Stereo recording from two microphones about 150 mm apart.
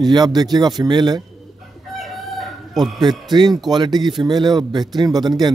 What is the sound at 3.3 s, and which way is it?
Speech, 30° right (ahead or behind).